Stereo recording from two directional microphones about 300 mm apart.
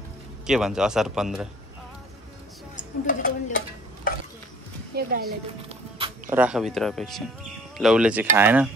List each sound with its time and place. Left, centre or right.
0.5 s speech: centre
2.7 s stir: left
4.9 s a woman's voice: right
5.7 s music: centre
6.2 s speech: centre